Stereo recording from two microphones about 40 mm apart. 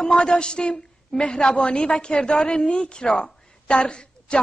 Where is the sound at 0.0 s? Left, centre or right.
Centre.